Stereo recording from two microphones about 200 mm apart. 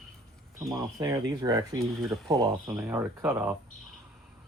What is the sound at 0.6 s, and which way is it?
Speech, 15° right (ahead or behind).